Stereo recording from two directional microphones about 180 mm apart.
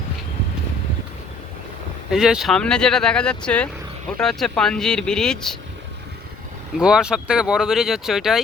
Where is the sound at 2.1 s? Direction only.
5° right (ahead or behind).